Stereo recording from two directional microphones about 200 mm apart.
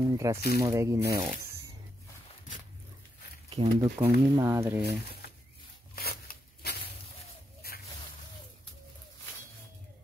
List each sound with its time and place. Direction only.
0.0 s speech: 15° right (ahead or behind)
3.4 s speech: 30° right (ahead or behind)
4.0 s speech: 15° right (ahead or behind)
5.9 s a sound: 50° left (ahead or behind)